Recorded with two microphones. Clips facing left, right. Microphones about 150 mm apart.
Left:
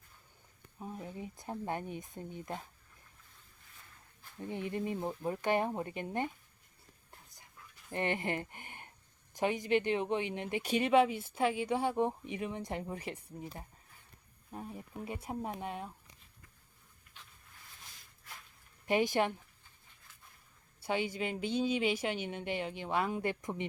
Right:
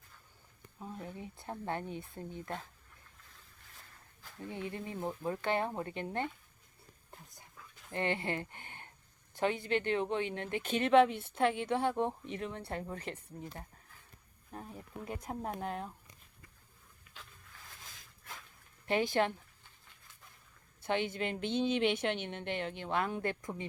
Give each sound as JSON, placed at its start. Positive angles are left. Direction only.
{"t": 0.8, "sound": "speech", "side_deg": 15}
{"t": 4.4, "sound": "speech", "side_deg": 20}
{"t": 7.9, "sound": "speech", "side_deg": 20}
{"t": 18.9, "sound": "speech", "side_deg": 15}
{"t": 20.8, "sound": "speech", "side_deg": 10}